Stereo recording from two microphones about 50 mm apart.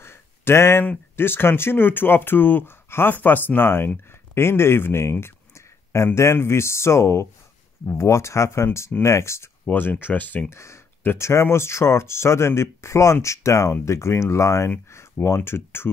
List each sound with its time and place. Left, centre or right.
0.0 s a sound: left
1.1 s speech: left
5.2 s a sound: left
6.1 s speech: left
8.0 s speech: left
9.7 s speech: left
10.5 s speech: left
11.4 s speech: left
13.8 s speech: left
14.9 s speech: left